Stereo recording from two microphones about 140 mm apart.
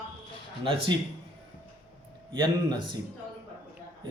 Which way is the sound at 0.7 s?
40° right (ahead or behind).